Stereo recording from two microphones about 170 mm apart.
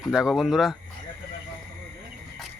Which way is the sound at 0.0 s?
5° right (ahead or behind).